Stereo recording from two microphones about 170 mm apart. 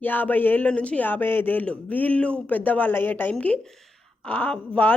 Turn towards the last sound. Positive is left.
turn(degrees=10)  # may be behind; listen again after turning